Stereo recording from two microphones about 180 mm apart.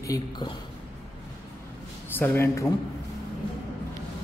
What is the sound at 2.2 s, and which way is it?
Speech, 10° left (ahead or behind).